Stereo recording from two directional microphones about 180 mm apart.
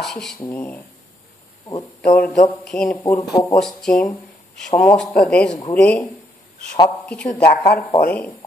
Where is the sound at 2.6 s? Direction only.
5° left (ahead or behind).